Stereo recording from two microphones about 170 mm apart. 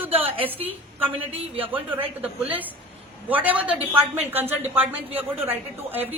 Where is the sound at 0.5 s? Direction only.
10° right (ahead or behind).